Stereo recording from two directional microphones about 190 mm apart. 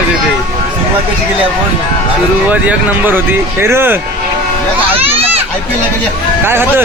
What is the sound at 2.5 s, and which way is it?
Speech, 10° right (ahead or behind).